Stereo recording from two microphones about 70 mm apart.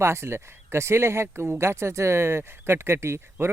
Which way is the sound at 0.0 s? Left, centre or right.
Right.